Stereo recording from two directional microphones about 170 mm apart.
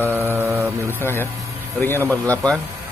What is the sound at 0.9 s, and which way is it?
Speech, 15° left (ahead or behind).